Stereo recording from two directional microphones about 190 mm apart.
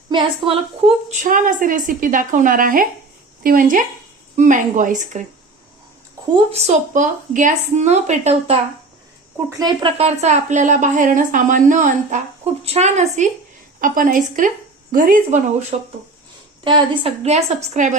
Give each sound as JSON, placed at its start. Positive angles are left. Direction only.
{"t": 0.1, "sound": "a woman's voice", "side_deg": -30}
{"t": 6.3, "sound": "a woman's voice", "side_deg": -35}
{"t": 9.5, "sound": "a woman's voice", "side_deg": -20}
{"t": 13.7, "sound": "a woman's voice", "side_deg": -45}
{"t": 15.7, "sound": "a woman's voice", "side_deg": -35}